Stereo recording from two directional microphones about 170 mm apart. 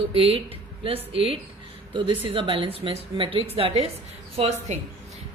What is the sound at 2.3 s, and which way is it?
A woman's voice, 30° right (ahead or behind).